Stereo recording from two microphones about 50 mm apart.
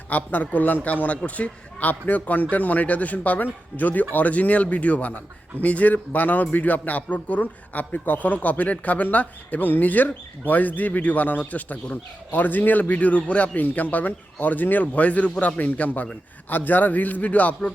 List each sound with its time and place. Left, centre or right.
0.1 s a man's voice: left